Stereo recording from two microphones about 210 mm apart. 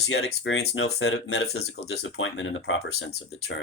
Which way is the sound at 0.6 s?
50° left (ahead or behind).